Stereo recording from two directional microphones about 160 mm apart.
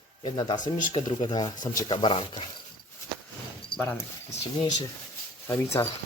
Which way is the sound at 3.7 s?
30° left (ahead or behind).